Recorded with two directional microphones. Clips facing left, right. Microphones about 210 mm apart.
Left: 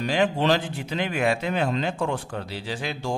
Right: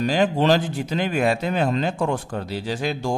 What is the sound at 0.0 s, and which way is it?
A man's voice, 40° right (ahead or behind).